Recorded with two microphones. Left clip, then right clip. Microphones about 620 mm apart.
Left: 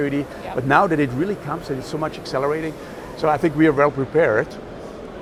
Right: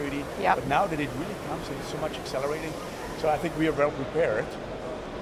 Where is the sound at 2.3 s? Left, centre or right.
Left.